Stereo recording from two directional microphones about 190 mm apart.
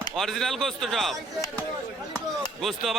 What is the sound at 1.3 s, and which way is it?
Speech, 15° left (ahead or behind).